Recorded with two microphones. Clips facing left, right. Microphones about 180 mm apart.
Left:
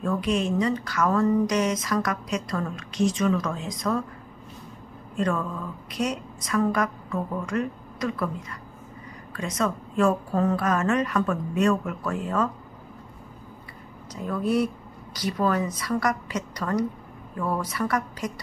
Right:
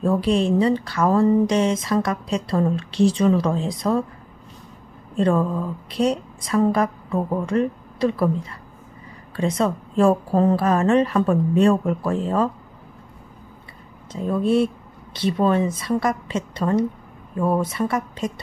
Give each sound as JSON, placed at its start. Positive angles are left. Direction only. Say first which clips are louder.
{"t": 0.0, "sound": "speech", "louder": "right 6 dB", "side_deg": -30}
{"t": 5.1, "sound": "speech", "louder": "right 7 dB", "side_deg": -30}
{"t": 14.1, "sound": "a woman's voice", "louder": "right 5 dB", "side_deg": -25}